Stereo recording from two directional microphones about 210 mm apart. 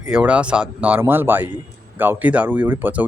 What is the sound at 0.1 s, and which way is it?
Speech, 5° right (ahead or behind).